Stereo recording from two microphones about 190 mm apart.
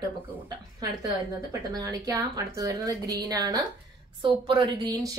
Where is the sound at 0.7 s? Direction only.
20° right (ahead or behind).